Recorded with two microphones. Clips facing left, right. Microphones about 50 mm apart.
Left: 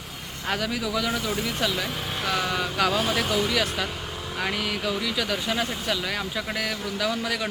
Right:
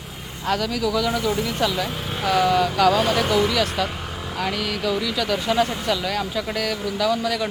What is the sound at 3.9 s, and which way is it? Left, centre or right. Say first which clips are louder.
Vehicle: right 3 dB; centre.